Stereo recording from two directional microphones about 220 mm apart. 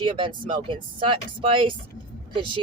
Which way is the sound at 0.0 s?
20° right (ahead or behind).